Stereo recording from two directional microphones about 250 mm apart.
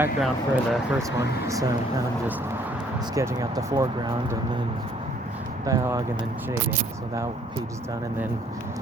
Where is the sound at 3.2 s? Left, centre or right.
Centre.